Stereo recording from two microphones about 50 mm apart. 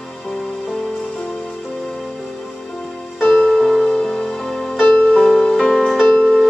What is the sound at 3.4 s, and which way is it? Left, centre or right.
Music, centre.